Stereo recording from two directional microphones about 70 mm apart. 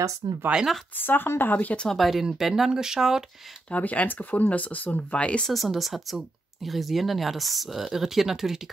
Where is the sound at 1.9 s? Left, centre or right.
Centre.